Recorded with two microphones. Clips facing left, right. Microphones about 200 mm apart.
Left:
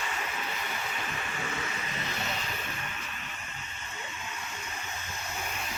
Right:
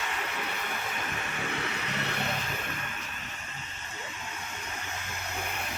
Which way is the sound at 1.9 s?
70° right (ahead or behind).